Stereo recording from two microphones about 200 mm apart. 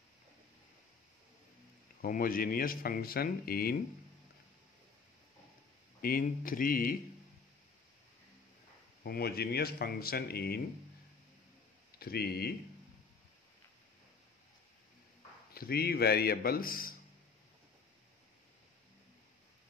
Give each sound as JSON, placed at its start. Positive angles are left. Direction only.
{"t": 2.0, "sound": "speech", "side_deg": 45}
{"t": 5.9, "sound": "speech", "side_deg": 45}
{"t": 9.0, "sound": "speech", "side_deg": 50}
{"t": 12.0, "sound": "speech", "side_deg": 50}
{"t": 15.5, "sound": "speech", "side_deg": 50}